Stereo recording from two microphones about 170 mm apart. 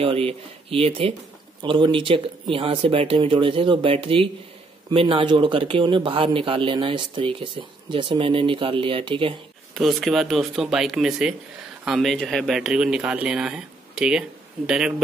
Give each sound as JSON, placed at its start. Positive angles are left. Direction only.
{"t": 0.0, "sound": "speech", "side_deg": -35}
{"t": 9.8, "sound": "speech", "side_deg": 0}